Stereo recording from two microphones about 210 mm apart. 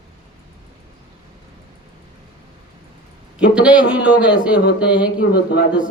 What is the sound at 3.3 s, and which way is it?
A man's voice, 5° right (ahead or behind).